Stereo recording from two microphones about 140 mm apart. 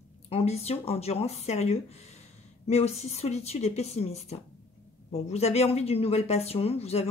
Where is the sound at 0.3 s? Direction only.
50° left (ahead or behind).